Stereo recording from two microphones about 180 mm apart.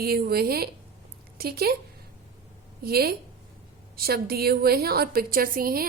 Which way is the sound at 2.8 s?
60° right (ahead or behind).